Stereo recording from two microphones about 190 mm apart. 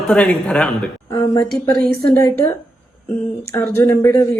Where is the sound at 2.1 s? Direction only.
15° left (ahead or behind).